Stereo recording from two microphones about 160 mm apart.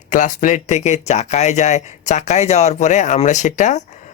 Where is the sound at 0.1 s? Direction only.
50° left (ahead or behind).